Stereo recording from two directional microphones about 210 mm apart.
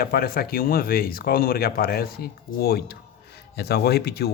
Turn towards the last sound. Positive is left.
turn(degrees=50)  # may be behind; listen again after turning